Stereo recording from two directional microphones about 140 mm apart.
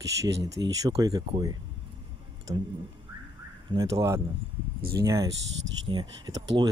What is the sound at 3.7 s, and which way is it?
Speech, 20° right (ahead or behind).